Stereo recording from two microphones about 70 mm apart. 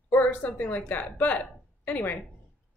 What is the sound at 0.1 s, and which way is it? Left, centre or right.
Speech, left.